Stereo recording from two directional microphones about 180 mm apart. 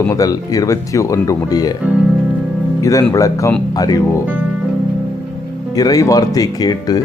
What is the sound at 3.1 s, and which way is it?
Speech, 20° left (ahead or behind).